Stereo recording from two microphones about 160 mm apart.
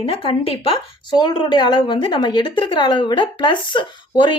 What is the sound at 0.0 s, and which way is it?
A woman's voice, 35° left (ahead or behind).